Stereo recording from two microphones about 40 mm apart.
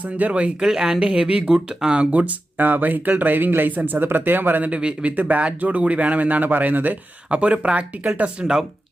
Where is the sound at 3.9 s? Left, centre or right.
Right.